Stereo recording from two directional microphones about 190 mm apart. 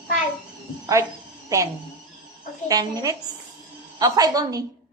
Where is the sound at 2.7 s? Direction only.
20° right (ahead or behind).